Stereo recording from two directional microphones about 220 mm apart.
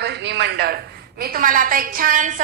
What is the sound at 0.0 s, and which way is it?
A woman's voice, 50° right (ahead or behind).